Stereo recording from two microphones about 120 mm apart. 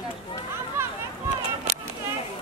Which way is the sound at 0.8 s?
20° right (ahead or behind).